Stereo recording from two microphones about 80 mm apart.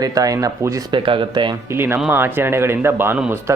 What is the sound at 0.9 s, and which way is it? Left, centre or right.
Speech, right.